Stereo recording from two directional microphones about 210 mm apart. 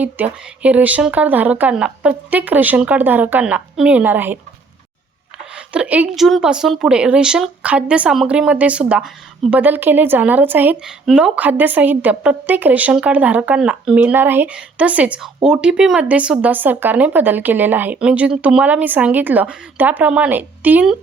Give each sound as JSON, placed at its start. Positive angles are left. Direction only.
{"t": 0.0, "sound": "a woman's voice", "side_deg": -5}
{"t": 5.5, "sound": "a woman's voice", "side_deg": -5}